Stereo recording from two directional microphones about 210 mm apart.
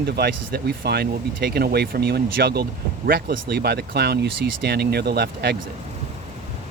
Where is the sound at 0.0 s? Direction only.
50° right (ahead or behind).